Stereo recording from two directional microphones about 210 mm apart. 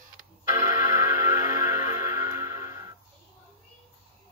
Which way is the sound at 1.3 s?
15° right (ahead or behind).